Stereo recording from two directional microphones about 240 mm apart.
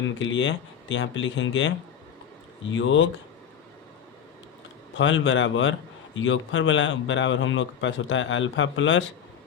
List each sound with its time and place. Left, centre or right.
0.2 s speech: left
2.7 s speech: left
4.9 s speech: left